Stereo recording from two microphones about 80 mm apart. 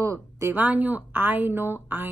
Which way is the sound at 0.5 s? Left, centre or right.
Right.